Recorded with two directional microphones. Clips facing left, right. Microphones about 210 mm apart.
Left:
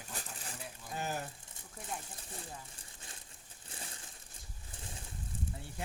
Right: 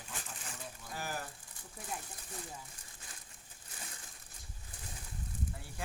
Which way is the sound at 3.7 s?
30° left (ahead or behind).